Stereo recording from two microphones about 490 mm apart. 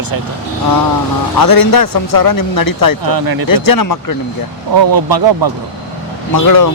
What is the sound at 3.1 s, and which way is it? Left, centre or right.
Speech, right.